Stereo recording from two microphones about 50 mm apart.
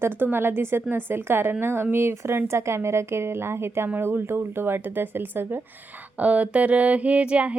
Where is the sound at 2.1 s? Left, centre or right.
Right.